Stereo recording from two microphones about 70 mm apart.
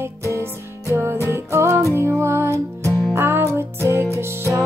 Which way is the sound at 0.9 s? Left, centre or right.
Right.